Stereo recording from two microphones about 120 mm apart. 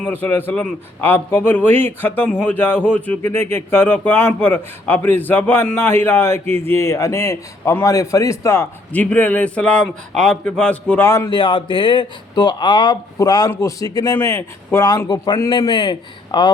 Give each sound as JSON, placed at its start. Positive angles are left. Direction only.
{"t": 0.0, "sound": "a man's voice", "side_deg": 15}
{"t": 8.9, "sound": "a man's voice", "side_deg": 10}
{"t": 11.3, "sound": "a man's voice", "side_deg": 40}
{"t": 14.8, "sound": "speech", "side_deg": 35}